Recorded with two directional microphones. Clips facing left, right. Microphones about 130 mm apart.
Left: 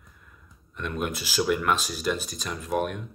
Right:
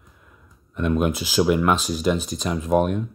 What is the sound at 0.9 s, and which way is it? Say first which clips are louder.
Speech: right 7 dB; 50° right (ahead or behind).